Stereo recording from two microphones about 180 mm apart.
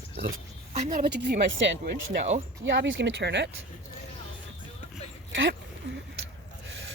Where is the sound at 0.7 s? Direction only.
45° right (ahead or behind).